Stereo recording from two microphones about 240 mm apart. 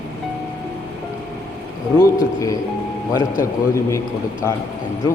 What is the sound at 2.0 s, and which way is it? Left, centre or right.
Speech, centre.